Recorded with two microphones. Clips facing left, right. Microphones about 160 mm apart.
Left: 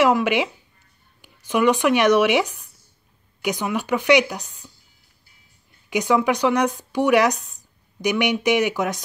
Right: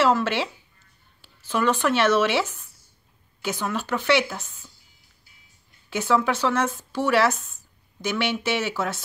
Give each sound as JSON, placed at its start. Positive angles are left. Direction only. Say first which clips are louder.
{"t": 0.0, "sound": "speech", "louder": "left 3 dB", "side_deg": 15}
{"t": 5.9, "sound": "speech", "louder": "left 3 dB", "side_deg": 15}